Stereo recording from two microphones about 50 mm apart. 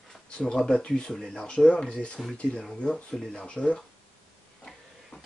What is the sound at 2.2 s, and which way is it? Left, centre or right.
Speech, centre.